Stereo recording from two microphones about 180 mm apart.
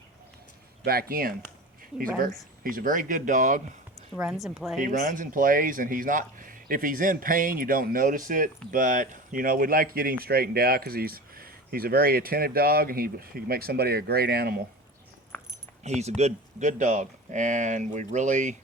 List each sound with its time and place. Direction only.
0.9 s speech: 55° right (ahead or behind)
4.1 s a woman's voice: 5° right (ahead or behind)
4.8 s speech: 45° right (ahead or behind)
15.8 s speech: 40° right (ahead or behind)